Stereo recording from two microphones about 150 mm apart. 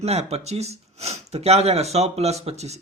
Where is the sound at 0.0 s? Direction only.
45° right (ahead or behind).